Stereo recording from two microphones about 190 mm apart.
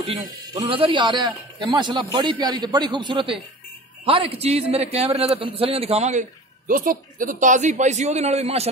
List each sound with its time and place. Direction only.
0.0 s a man's voice: 30° right (ahead or behind)
6.7 s a man's voice: 45° right (ahead or behind)